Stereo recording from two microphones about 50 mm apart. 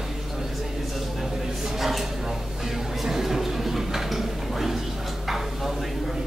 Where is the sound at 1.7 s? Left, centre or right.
Centre.